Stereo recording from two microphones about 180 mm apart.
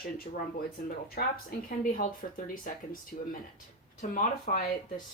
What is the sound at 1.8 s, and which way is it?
Speech, 50° left (ahead or behind).